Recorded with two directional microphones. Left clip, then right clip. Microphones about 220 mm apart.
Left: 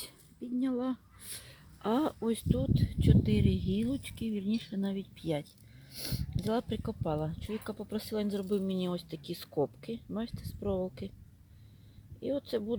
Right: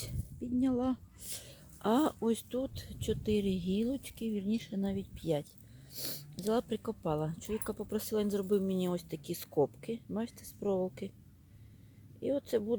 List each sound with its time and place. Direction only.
0.0 s speech: 5° right (ahead or behind)
12.2 s speech: 5° right (ahead or behind)